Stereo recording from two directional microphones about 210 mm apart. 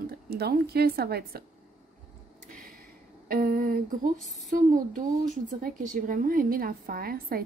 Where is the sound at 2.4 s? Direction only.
40° right (ahead or behind).